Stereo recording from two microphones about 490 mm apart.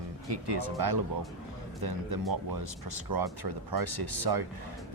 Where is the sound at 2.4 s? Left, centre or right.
Right.